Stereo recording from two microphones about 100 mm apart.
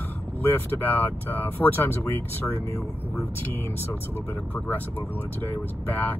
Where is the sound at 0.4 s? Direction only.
20° left (ahead or behind).